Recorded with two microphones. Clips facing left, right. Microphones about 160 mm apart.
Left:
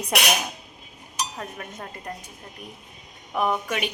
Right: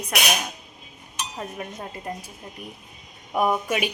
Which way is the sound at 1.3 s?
15° right (ahead or behind).